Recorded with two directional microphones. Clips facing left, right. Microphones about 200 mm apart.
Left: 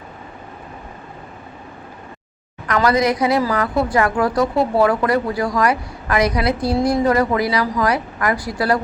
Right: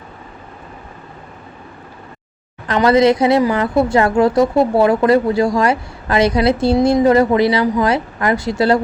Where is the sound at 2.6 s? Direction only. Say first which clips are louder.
Right 5 dB; 25° right (ahead or behind).